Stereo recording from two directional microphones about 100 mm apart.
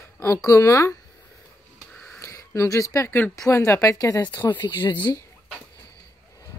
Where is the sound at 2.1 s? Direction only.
30° left (ahead or behind).